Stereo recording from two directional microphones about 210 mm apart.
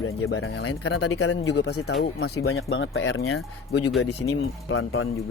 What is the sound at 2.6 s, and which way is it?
Speech, 65° left (ahead or behind).